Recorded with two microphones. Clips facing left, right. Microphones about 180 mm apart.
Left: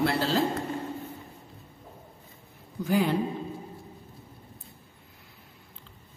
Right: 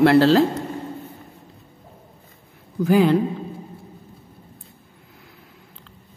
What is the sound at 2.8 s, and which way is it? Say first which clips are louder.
Speech: right 9 dB; 90° right.